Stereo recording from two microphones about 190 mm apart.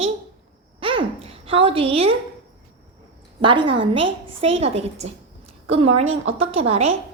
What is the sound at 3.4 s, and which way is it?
A woman's voice, 25° right (ahead or behind).